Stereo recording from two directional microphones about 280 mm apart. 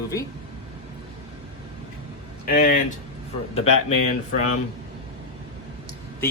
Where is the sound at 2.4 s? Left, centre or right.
Left.